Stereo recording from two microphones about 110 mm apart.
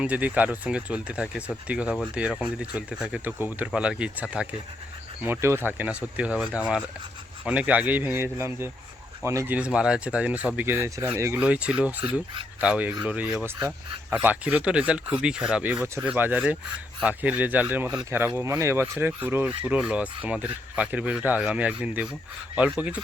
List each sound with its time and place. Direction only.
0.0 s speech: 15° right (ahead or behind)
5.2 s speech: 20° right (ahead or behind)
9.5 s speech: 10° right (ahead or behind)
10.8 s speech: 25° right (ahead or behind)
11.3 s speech: 10° right (ahead or behind)